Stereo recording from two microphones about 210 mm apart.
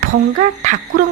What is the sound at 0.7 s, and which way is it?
Speech, 35° right (ahead or behind).